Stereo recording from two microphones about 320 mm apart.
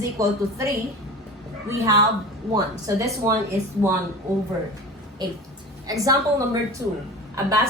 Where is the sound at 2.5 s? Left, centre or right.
Centre.